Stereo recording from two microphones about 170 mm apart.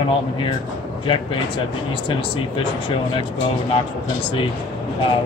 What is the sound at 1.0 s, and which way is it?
Speech, 30° left (ahead or behind).